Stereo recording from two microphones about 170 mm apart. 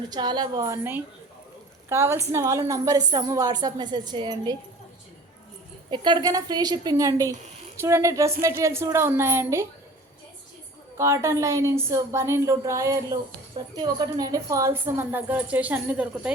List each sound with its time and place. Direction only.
0.1 s a woman's voice: 25° right (ahead or behind)
5.9 s a woman's voice: 25° right (ahead or behind)
10.9 s a woman's voice: 15° right (ahead or behind)